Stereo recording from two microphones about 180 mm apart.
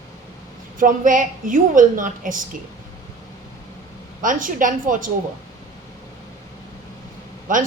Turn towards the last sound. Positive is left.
turn(degrees=-45)  # may be behind; listen again after turning